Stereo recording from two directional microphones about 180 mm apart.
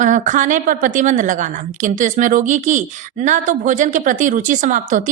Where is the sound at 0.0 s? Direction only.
45° right (ahead or behind).